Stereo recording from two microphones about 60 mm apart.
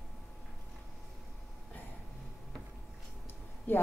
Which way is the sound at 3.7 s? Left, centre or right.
Left.